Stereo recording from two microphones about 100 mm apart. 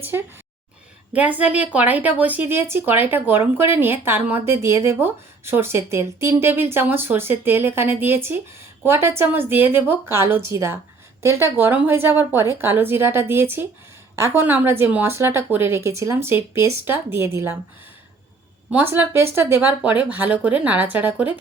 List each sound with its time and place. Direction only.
0.0 s a woman's voice: 20° right (ahead or behind)
18.7 s speech: 20° right (ahead or behind)